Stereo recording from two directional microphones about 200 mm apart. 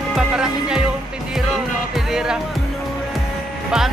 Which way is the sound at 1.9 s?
Centre (ahead or behind).